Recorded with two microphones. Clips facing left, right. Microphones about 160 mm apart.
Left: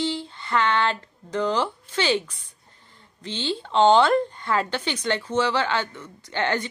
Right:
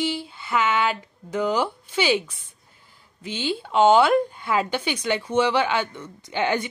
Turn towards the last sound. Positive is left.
turn(degrees=-10)  # may be behind; listen again after turning